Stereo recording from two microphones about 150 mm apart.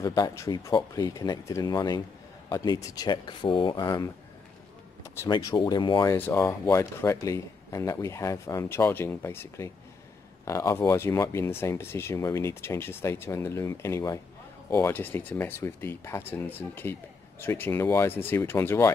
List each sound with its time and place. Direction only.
0.0 s speech: 25° left (ahead or behind)
5.3 s speech: 30° left (ahead or behind)
6.1 s speech: 15° left (ahead or behind)